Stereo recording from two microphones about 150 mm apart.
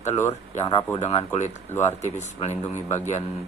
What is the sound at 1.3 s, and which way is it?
Speech, 50° left (ahead or behind).